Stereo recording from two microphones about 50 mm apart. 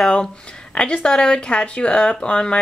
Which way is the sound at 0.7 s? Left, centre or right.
Centre.